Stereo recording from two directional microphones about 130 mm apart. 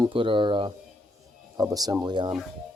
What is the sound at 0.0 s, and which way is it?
Speech, 40° right (ahead or behind).